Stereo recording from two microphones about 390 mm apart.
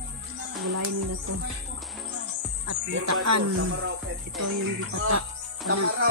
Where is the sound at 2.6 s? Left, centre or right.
Right.